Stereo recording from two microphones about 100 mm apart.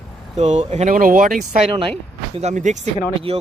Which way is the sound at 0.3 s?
90° right.